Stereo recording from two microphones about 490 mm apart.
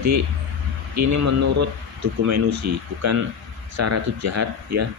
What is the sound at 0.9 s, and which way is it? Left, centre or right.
Speech, right.